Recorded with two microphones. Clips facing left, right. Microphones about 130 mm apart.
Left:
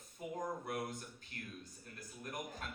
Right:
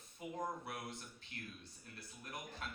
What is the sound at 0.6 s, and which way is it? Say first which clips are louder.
Speech: left 6 dB; 45° left (ahead or behind).